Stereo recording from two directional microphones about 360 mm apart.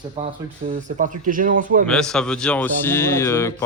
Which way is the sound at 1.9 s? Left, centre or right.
Centre.